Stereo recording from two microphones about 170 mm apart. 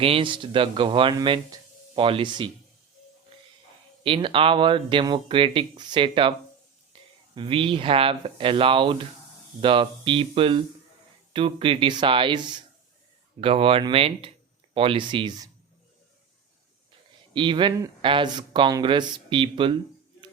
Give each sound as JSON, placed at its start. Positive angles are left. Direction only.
{"t": 0.0, "sound": "speech", "side_deg": -30}
{"t": 4.0, "sound": "speech", "side_deg": -30}
{"t": 7.3, "sound": "speech", "side_deg": -30}
{"t": 17.3, "sound": "speech", "side_deg": -30}